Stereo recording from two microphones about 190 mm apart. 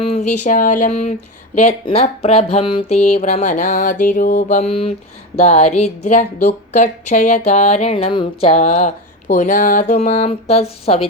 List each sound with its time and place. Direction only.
0.0 s speech: 35° left (ahead or behind)